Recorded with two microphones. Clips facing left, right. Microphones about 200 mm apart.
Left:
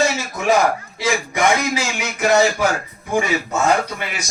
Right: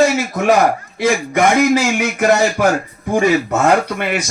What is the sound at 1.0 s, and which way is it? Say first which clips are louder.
Speech: right 7 dB; 55° right (ahead or behind).